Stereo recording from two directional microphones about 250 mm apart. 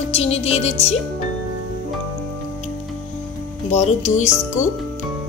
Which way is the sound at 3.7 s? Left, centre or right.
Left.